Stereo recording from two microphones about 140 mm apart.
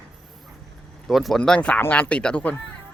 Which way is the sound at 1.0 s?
Centre (ahead or behind).